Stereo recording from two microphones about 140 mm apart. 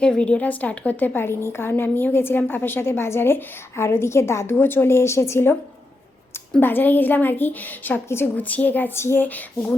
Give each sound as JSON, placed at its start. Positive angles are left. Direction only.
{"t": 0.0, "sound": "a woman's voice", "side_deg": 5}
{"t": 6.6, "sound": "a woman's voice", "side_deg": 15}